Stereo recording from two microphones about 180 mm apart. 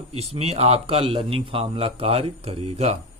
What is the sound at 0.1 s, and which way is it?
Speech, 35° right (ahead or behind).